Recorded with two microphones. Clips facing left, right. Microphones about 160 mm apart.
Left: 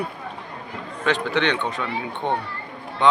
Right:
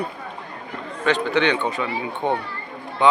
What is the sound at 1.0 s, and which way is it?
Speech, centre (ahead or behind).